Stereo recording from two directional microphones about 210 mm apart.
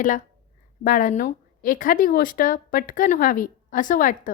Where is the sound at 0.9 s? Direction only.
40° left (ahead or behind).